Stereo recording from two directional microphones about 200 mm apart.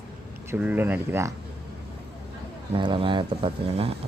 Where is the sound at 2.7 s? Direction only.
25° right (ahead or behind).